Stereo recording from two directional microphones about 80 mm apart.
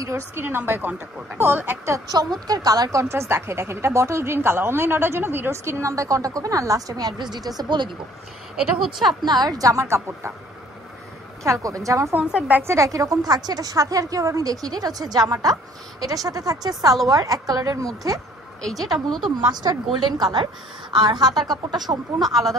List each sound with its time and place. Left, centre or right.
0.0 s a woman's voice: right
2.4 s speech: right
9.2 s a woman's voice: right
11.4 s a woman's voice: right
12.2 s a woman's voice: centre
12.6 s a woman's voice: right
18.6 s a woman's voice: centre
19.5 s speech: right
22.2 s a woman's voice: centre